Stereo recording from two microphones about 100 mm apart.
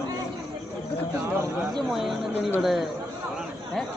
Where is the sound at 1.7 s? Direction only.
Centre (ahead or behind).